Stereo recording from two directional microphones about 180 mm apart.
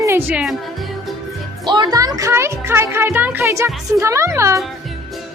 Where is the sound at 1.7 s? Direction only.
25° right (ahead or behind).